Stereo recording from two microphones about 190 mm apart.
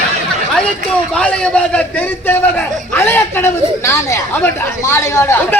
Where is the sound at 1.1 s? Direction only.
5° left (ahead or behind).